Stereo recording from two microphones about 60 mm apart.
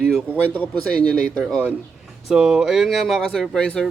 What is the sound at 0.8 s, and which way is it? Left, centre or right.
Speech, centre.